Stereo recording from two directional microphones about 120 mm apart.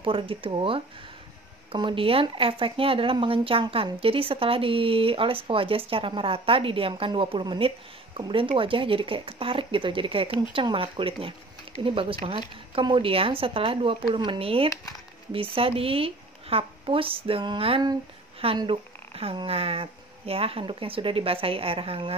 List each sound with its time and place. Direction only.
0.0 s speech: 45° right (ahead or behind)